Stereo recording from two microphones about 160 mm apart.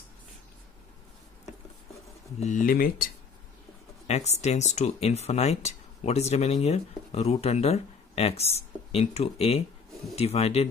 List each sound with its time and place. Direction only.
2.4 s speech: 55° left (ahead or behind)
4.1 s speech: 45° left (ahead or behind)